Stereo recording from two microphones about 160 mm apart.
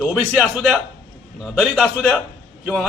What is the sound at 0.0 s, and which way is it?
A man's voice, centre (ahead or behind).